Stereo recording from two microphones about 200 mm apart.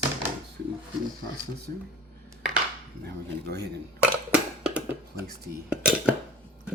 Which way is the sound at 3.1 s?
55° right (ahead or behind).